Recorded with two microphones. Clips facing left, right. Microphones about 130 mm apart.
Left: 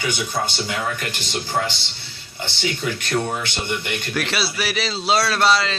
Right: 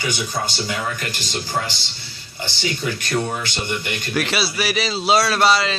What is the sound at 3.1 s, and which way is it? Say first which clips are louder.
Speech: even; 20° left (ahead or behind).